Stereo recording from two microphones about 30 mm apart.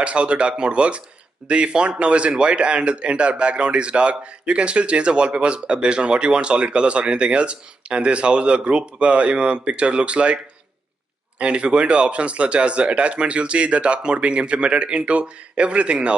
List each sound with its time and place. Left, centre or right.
0.0 s a man's voice: right